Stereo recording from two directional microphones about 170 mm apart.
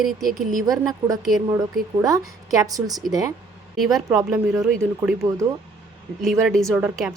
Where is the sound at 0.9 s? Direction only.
20° right (ahead or behind).